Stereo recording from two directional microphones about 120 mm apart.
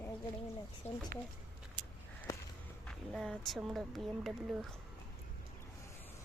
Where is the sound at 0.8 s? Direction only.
65° left (ahead or behind).